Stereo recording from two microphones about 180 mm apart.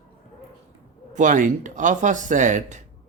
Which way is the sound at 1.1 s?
45° right (ahead or behind).